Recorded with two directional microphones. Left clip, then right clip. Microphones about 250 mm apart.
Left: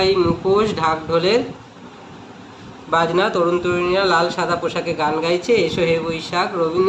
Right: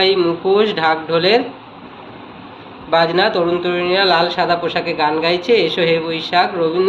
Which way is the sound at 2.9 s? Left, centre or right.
Centre.